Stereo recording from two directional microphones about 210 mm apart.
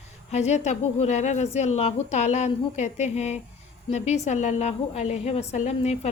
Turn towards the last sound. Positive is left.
turn(degrees=35)  # may be behind; listen again after turning